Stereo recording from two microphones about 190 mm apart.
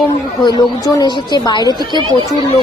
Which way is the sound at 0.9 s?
20° left (ahead or behind).